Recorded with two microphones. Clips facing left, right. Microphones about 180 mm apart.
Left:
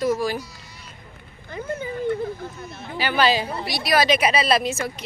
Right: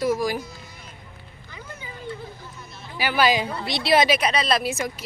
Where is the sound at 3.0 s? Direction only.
10° right (ahead or behind).